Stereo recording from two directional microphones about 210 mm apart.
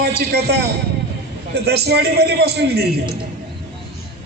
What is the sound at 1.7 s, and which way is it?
Speech, 50° right (ahead or behind).